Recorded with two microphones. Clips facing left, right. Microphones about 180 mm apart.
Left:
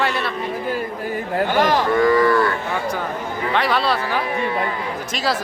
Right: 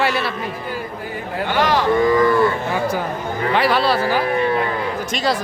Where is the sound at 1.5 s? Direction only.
45° left (ahead or behind).